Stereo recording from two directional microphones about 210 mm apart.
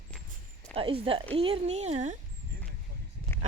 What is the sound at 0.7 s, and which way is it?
Speech, 25° right (ahead or behind).